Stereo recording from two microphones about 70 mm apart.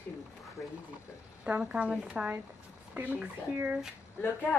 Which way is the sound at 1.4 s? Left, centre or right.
Centre.